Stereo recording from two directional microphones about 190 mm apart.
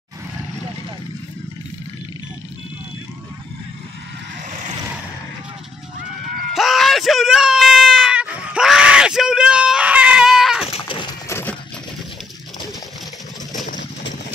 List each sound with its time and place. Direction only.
6.5 s screaming: centre (ahead or behind)
10.7 s a sound: 25° left (ahead or behind)
11.2 s coin: 15° left (ahead or behind)